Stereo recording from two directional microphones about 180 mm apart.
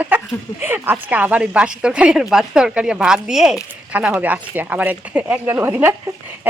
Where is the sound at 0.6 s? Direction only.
10° right (ahead or behind).